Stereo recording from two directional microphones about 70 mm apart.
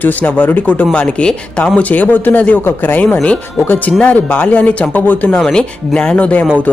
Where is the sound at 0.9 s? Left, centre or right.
Centre.